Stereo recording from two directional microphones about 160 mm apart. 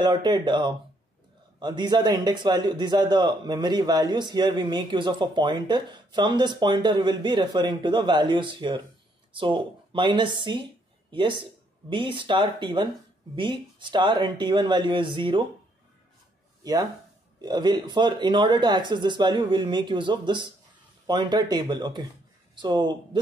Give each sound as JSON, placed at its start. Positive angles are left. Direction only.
{"t": 0.0, "sound": "speech", "side_deg": -25}
{"t": 17.4, "sound": "speech", "side_deg": -25}